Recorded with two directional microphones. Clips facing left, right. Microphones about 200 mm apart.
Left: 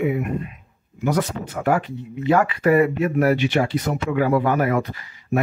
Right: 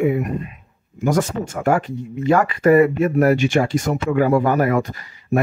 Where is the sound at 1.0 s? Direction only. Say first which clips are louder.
Right 3 dB; 45° right (ahead or behind).